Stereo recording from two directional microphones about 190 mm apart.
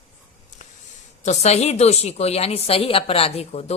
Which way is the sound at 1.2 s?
35° left (ahead or behind).